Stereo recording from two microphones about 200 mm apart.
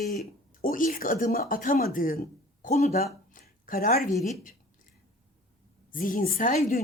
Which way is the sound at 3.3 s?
45° left (ahead or behind).